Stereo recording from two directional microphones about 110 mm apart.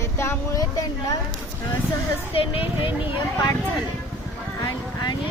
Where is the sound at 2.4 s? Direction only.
55° left (ahead or behind).